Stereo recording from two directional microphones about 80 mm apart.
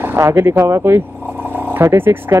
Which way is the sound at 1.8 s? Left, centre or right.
Right.